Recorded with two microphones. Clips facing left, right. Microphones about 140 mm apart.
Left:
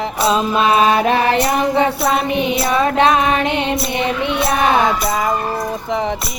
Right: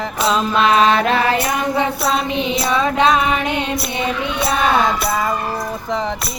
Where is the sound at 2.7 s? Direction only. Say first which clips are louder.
Left 1 dB; 50° left (ahead or behind).